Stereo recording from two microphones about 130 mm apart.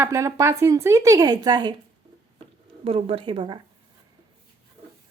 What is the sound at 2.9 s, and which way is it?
Speech, 45° right (ahead or behind).